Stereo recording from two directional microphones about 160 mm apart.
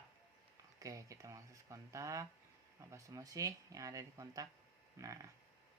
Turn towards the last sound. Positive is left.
turn(degrees=-20)  # may be behind; listen again after turning